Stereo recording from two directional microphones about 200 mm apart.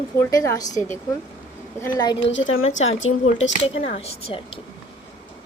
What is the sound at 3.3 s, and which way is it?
Speech, 30° left (ahead or behind).